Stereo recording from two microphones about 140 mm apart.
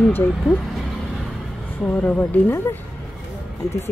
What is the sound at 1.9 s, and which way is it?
Speech, 10° left (ahead or behind).